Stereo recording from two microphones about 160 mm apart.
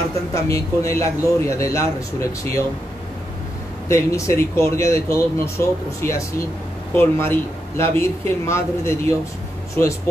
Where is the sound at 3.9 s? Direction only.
20° left (ahead or behind).